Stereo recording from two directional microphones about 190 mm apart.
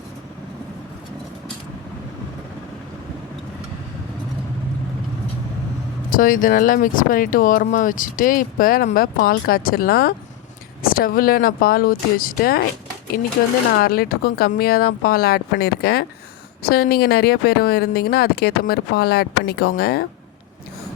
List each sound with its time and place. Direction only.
6.1 s speech: 45° left (ahead or behind)
13.8 s speech: 50° left (ahead or behind)